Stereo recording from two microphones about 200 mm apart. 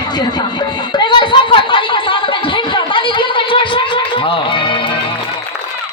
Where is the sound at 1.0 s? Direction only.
25° left (ahead or behind).